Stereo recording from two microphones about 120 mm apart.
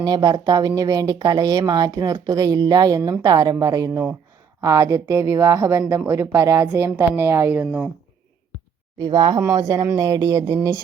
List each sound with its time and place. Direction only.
0.0 s speech: 35° right (ahead or behind); by 7.9 s 10° right (ahead or behind)
9.0 s speech: 35° right (ahead or behind)